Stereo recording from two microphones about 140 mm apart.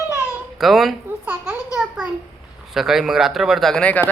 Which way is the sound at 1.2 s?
15° right (ahead or behind).